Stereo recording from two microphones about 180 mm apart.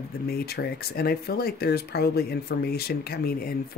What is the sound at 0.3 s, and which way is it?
Speech, 60° left (ahead or behind).